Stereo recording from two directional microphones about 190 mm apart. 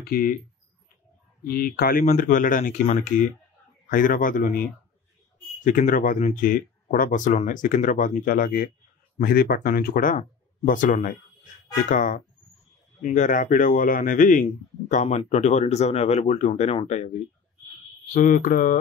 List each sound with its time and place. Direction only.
0.0 s speech: 50° left (ahead or behind)
1.4 s speech: 50° left (ahead or behind)
5.6 s speech: 45° left (ahead or behind)
18.1 s speech: 45° left (ahead or behind)